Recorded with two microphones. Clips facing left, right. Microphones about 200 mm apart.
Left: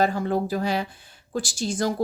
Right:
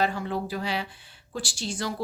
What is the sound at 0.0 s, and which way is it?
Speech, 45° left (ahead or behind).